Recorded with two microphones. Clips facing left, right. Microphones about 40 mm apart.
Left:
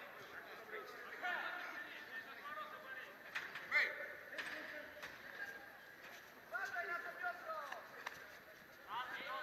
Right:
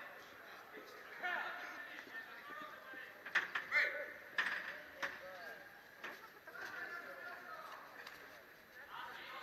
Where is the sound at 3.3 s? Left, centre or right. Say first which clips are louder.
Right 3 dB; right.